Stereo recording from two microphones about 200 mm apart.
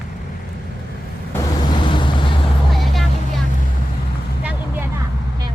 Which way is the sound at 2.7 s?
Centre (ahead or behind).